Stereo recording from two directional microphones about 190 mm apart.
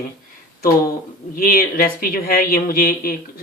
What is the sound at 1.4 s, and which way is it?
Speech, 50° left (ahead or behind).